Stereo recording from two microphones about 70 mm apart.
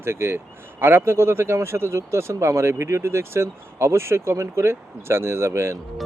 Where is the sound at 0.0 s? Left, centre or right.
Right.